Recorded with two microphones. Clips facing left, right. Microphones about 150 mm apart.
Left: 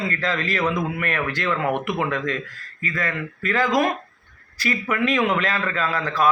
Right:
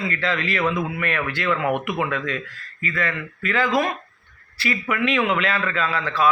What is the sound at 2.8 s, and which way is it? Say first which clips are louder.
Speech: even; 40° left (ahead or behind).